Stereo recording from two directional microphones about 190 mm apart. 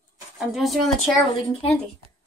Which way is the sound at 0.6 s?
Centre (ahead or behind).